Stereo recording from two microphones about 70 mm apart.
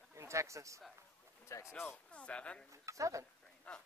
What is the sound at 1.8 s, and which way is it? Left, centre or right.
Speech, centre.